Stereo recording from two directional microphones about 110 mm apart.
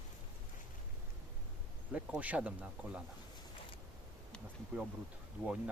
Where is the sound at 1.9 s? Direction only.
15° right (ahead or behind).